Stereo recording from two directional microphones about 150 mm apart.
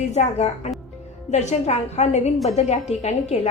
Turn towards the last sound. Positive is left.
turn(degrees=50)  # may be behind; listen again after turning